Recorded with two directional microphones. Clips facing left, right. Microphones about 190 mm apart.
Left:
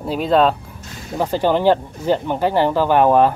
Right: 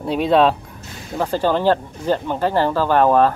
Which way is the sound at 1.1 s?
15° left (ahead or behind).